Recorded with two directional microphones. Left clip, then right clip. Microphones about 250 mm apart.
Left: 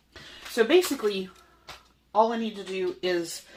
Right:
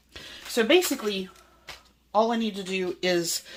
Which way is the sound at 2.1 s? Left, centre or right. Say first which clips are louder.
Even; right.